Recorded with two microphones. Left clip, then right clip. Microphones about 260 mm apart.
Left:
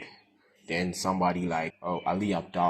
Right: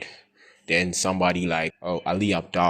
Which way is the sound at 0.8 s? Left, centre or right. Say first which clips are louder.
Right 6 dB; right.